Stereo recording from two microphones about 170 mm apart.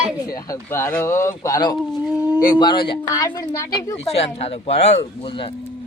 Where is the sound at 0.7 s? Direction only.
15° left (ahead or behind).